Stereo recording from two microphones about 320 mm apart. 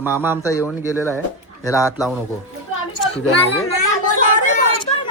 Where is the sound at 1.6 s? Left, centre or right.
Centre.